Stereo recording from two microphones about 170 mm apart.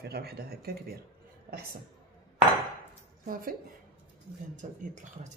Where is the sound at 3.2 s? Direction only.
55° right (ahead or behind).